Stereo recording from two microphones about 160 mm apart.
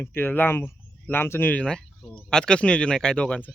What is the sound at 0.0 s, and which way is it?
Speech, 15° left (ahead or behind).